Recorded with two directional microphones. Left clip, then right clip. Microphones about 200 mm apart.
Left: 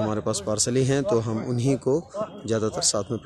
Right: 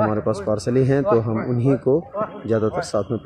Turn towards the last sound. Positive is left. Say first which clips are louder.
# right 3 dB
turn(degrees=5)  # may be behind; listen again after turning